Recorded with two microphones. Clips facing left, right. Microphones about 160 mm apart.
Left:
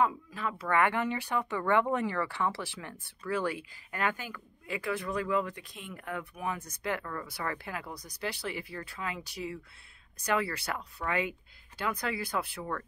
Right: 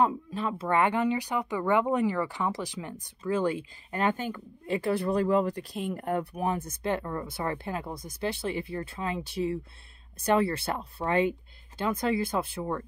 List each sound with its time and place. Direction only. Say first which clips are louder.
0.0 s speech: right 3 dB; 25° right (ahead or behind)